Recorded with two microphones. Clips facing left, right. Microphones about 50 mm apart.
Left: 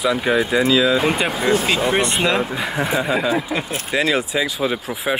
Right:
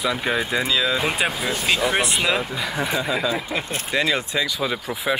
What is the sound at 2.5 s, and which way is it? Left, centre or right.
Speech, left.